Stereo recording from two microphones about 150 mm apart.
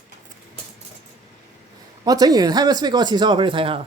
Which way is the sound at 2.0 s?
25° right (ahead or behind).